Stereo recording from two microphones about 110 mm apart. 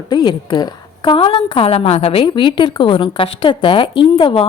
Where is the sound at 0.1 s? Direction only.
40° left (ahead or behind).